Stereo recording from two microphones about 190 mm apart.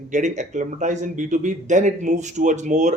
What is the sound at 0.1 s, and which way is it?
Speech, 40° right (ahead or behind).